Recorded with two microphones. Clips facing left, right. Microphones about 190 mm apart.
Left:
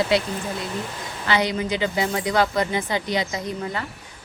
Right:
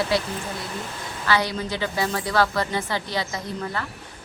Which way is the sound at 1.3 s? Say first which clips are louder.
Left 2 dB; 20° left (ahead or behind).